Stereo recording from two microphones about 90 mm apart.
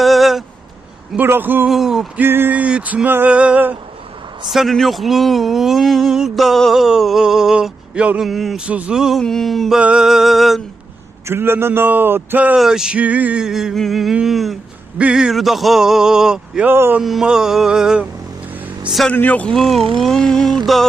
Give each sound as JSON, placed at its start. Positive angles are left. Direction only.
{"t": 0.0, "sound": "a sound", "side_deg": 0}
{"t": 1.1, "sound": "speech", "side_deg": -20}
{"t": 1.6, "sound": "speech", "side_deg": -5}
{"t": 2.1, "sound": "speech", "side_deg": -25}
{"t": 4.4, "sound": "speech", "side_deg": 0}
{"t": 8.3, "sound": "speech", "side_deg": 0}
{"t": 8.6, "sound": "speech", "side_deg": -15}
{"t": 11.3, "sound": "speech", "side_deg": -25}
{"t": 12.5, "sound": "speech", "side_deg": -5}
{"t": 13.4, "sound": "speech", "side_deg": -5}
{"t": 16.6, "sound": "speech", "side_deg": -25}
{"t": 17.0, "sound": "speech", "side_deg": -5}
{"t": 19.1, "sound": "a man's voice", "side_deg": 20}
{"t": 19.5, "sound": "speech", "side_deg": 0}